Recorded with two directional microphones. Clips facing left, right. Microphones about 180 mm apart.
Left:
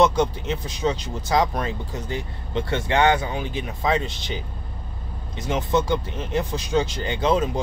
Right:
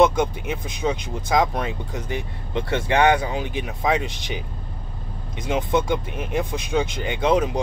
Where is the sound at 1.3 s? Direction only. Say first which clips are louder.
Right 1 dB; 15° right (ahead or behind).